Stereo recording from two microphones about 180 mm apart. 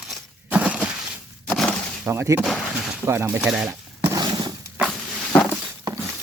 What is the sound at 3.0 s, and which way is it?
Speech, 15° right (ahead or behind).